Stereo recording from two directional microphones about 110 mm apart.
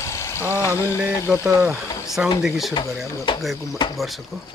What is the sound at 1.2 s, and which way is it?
Speech, 10° right (ahead or behind).